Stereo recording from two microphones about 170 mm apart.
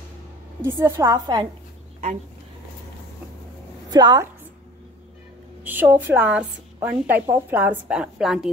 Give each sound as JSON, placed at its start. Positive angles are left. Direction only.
{"t": 0.7, "sound": "a woman's voice", "side_deg": -15}
{"t": 3.9, "sound": "a woman's voice", "side_deg": -25}
{"t": 5.6, "sound": "a woman's voice", "side_deg": -10}